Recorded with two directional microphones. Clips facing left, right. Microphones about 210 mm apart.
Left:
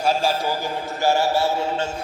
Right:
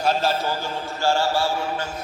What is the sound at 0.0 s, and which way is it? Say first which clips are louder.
A man's voice: left 1 dB; 10° left (ahead or behind).